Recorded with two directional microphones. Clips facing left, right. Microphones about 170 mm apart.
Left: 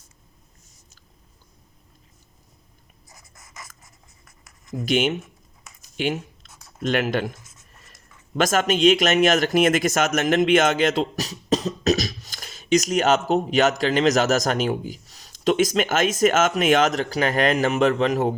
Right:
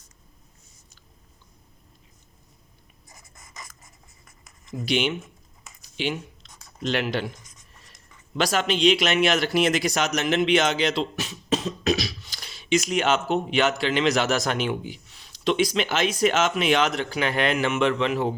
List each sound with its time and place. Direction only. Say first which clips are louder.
3.1 s writing: even; centre (ahead or behind)
4.9 s speech: left 3 dB; 45° left (ahead or behind)
5.8 s a sound: left 3 dB; 50° left (ahead or behind)
6.5 s a sound: left 2 dB; 5° left (ahead or behind)
6.8 s speech: left 3 dB; 50° left (ahead or behind)
7.3 s writing: left 1 dB; 5° left (ahead or behind)
8.4 s speech: left 3 dB; 50° left (ahead or behind)